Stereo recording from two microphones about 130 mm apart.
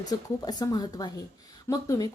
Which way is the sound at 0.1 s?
30° left (ahead or behind).